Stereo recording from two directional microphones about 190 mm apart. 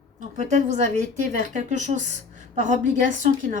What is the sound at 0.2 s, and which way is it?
A woman's voice, 40° right (ahead or behind).